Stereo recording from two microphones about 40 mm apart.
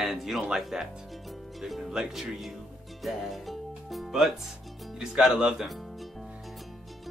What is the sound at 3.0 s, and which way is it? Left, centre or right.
Music, centre.